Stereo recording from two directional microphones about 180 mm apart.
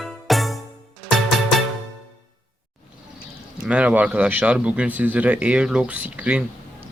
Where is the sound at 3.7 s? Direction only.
5° right (ahead or behind).